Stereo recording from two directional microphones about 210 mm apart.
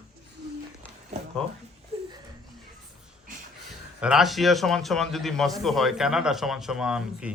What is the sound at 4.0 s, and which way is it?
Speech, 5° right (ahead or behind).